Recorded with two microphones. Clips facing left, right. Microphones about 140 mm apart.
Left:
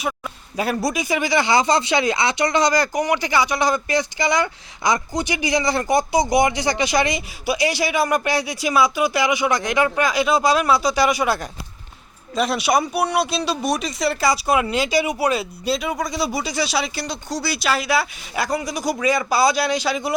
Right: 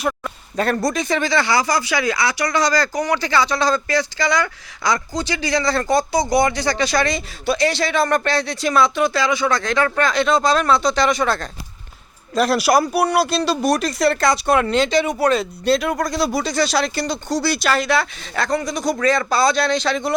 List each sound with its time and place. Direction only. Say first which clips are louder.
0.5 s speech: right 2 dB; 5° left (ahead or behind)
12.3 s speech: right 3 dB; centre (ahead or behind)